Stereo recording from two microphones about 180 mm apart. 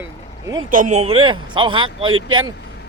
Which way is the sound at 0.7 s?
45° right (ahead or behind).